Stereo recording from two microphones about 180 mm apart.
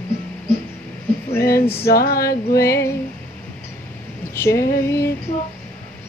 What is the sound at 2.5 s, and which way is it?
Female singing, 15° left (ahead or behind).